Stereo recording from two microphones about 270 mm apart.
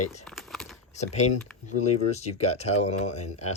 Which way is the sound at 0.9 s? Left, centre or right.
Left.